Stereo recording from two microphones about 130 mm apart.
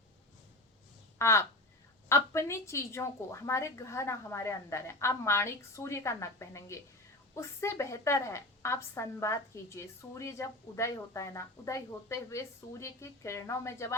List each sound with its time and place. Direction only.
1.2 s a woman's voice: 20° left (ahead or behind)